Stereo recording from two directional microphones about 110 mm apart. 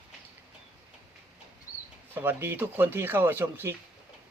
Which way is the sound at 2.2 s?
20° right (ahead or behind).